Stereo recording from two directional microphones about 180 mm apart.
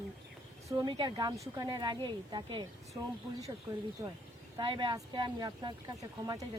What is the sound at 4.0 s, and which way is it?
A woman's voice, 20° right (ahead or behind).